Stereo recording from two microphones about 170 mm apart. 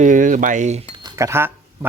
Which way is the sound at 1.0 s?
15° right (ahead or behind).